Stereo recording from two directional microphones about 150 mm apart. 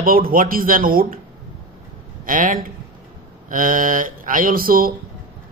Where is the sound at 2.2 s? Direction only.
65° right (ahead or behind).